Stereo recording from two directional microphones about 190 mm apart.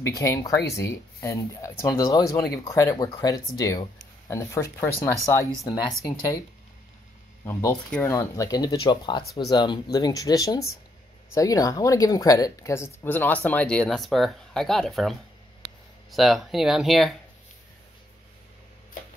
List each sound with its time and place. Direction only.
0.0 s speech: 15° left (ahead or behind)
7.7 s speech: 5° left (ahead or behind)
8.1 s speech: 15° left (ahead or behind); by 17.1 s centre (ahead or behind)